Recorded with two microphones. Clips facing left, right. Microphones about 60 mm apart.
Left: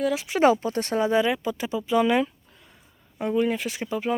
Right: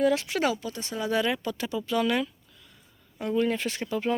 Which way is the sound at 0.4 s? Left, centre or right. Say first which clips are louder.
Left 13 dB; left.